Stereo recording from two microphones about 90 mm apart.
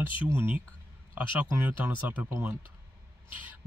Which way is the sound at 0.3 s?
25° right (ahead or behind).